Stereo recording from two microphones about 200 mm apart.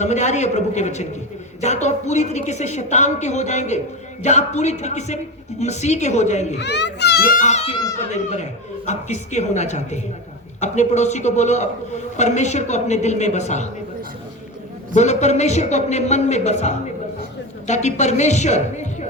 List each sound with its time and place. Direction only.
0.0 s a woman's voice: 35° left (ahead or behind)
6.6 s a child's voice: 60° left (ahead or behind); by 13.7 s 35° left (ahead or behind)
14.9 s a woman's voice: 35° left (ahead or behind)